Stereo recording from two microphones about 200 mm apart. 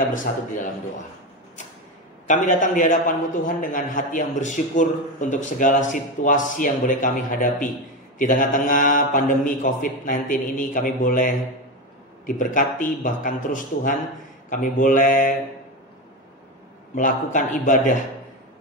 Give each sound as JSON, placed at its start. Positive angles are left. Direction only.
{"t": 0.3, "sound": "speech", "side_deg": 45}
{"t": 2.2, "sound": "a man's voice", "side_deg": 40}
{"t": 16.9, "sound": "a man's voice", "side_deg": 40}